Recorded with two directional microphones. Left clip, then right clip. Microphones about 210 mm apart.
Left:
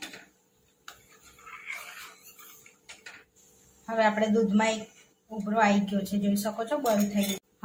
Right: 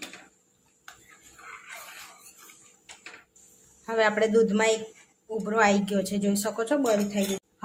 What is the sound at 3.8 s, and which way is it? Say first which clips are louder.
A woman's voice: right 2 dB; 35° right (ahead or behind).